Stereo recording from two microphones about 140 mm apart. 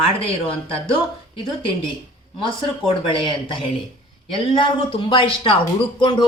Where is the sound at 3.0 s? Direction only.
35° left (ahead or behind).